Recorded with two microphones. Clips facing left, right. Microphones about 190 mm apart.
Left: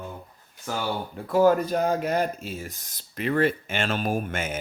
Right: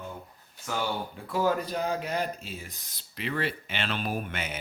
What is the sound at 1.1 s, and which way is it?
Speech, 50° left (ahead or behind).